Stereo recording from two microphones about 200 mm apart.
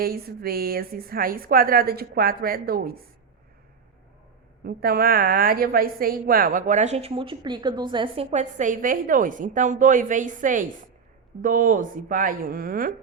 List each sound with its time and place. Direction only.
0.0 s a woman's voice: 50° right (ahead or behind)
4.6 s a woman's voice: 50° right (ahead or behind)